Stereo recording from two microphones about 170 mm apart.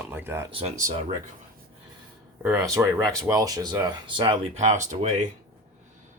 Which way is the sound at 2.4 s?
15° right (ahead or behind).